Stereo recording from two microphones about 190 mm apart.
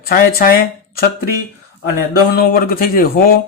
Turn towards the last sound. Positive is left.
turn(degrees=55)  # may be behind; listen again after turning